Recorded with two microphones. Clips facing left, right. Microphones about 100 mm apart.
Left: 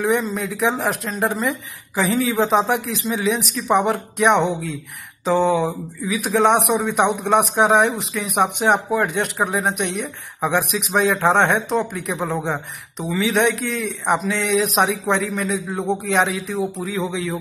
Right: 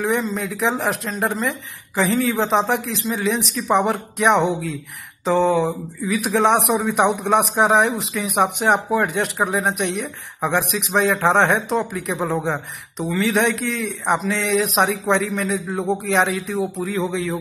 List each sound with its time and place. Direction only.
0.0 s speech: centre (ahead or behind)